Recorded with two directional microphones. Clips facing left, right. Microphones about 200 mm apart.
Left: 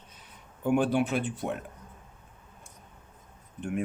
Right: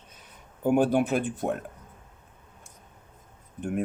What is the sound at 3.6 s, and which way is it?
Speech, 40° right (ahead or behind).